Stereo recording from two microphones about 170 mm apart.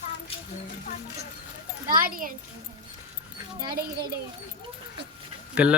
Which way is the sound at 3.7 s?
65° right (ahead or behind).